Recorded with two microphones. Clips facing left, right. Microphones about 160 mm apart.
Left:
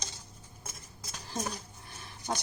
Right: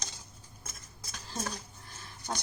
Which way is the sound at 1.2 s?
15° left (ahead or behind).